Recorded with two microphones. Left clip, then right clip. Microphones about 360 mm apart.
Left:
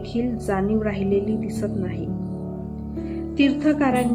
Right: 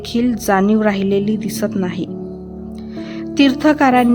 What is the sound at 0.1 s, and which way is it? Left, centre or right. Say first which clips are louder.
A woman's voice: right 9 dB; right.